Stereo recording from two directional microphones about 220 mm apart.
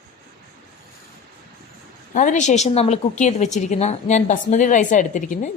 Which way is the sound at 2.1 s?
35° left (ahead or behind).